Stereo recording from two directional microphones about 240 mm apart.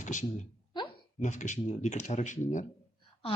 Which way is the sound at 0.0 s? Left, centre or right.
Left.